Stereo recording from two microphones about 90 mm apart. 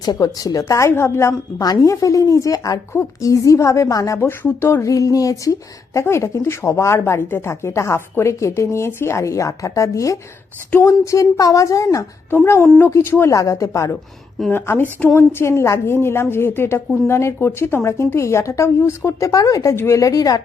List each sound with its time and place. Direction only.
0.0 s speech: 45° left (ahead or behind)
2.9 s speech: 30° left (ahead or behind)
4.3 s speech: 25° left (ahead or behind)
12.8 s a woman's voice: 25° left (ahead or behind)
14.5 s a woman's voice: 25° left (ahead or behind); by 19.7 s 40° left (ahead or behind)
19.7 s a woman's voice: 25° left (ahead or behind)
20.0 s a woman's voice: 40° left (ahead or behind)